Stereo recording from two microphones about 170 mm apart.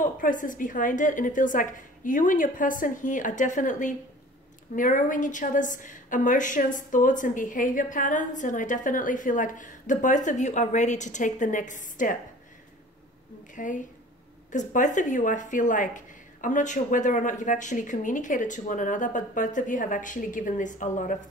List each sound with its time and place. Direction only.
0.0 s a woman's voice: 50° left (ahead or behind)
13.6 s a woman's voice: 50° left (ahead or behind)